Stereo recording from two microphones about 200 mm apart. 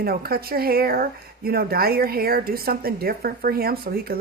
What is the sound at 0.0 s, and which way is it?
A woman's voice, 50° right (ahead or behind).